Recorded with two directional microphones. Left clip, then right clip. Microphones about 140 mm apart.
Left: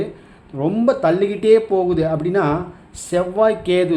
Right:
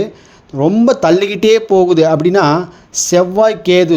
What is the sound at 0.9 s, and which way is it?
A man's voice, 60° right (ahead or behind).